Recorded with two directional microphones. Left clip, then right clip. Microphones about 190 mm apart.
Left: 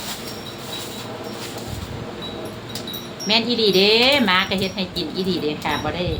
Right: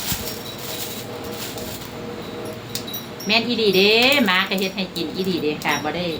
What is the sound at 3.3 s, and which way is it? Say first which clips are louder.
Speech: left 1 dB; 30° left (ahead or behind).